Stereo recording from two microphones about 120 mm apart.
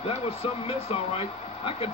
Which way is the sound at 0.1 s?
55° left (ahead or behind).